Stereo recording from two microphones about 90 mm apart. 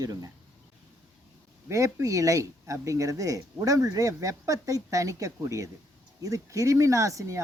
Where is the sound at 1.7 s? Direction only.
35° right (ahead or behind).